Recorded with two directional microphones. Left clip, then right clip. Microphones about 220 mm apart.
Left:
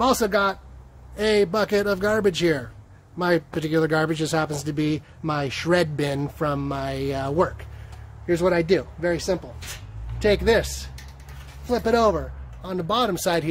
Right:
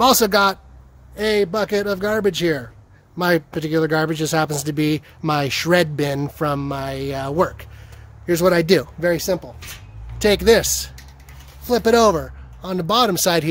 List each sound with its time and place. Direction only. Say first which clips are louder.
0.0 s speech: right 6 dB; 40° right (ahead or behind)
1.1 s a man's voice: right 2 dB; 20° right (ahead or behind)
3.2 s a man's voice: right 3 dB; 30° right (ahead or behind)
8.3 s speech: right 5 dB; 50° right (ahead or behind)